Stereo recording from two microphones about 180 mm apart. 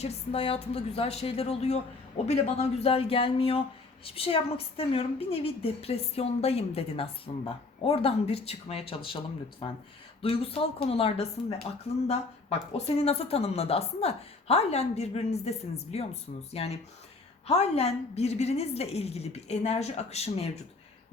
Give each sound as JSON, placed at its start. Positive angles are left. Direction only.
{"t": 0.0, "sound": "a woman's voice", "side_deg": 35}